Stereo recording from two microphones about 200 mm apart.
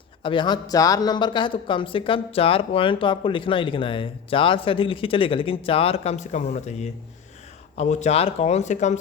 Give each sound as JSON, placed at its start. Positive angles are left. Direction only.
{"t": 0.2, "sound": "speech", "side_deg": 25}
{"t": 7.8, "sound": "speech", "side_deg": 35}